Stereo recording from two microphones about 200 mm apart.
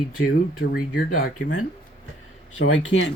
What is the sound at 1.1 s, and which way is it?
Speech, 90° left.